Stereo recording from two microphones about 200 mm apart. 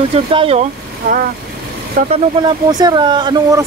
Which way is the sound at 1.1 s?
45° right (ahead or behind).